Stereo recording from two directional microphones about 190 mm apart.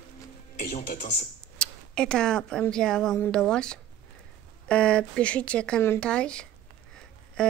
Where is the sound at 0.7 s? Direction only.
35° left (ahead or behind).